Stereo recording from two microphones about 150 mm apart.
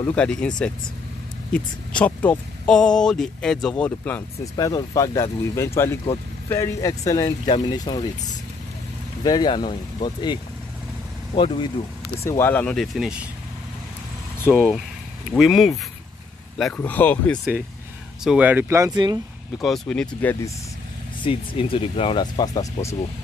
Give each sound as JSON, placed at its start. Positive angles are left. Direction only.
{"t": 0.1, "sound": "speech", "side_deg": 5}
{"t": 4.6, "sound": "speech", "side_deg": 25}
{"t": 9.2, "sound": "speech", "side_deg": 25}
{"t": 12.3, "sound": "speech", "side_deg": 15}
{"t": 12.7, "sound": "speech", "side_deg": 0}
{"t": 14.5, "sound": "speech", "side_deg": -10}
{"t": 18.2, "sound": "speech", "side_deg": -10}
{"t": 18.9, "sound": "speech", "side_deg": -30}
{"t": 19.6, "sound": "speech", "side_deg": 5}
{"t": 21.2, "sound": "speech", "side_deg": 35}